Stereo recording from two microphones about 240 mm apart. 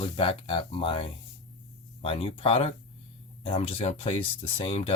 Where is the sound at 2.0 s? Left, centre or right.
Left.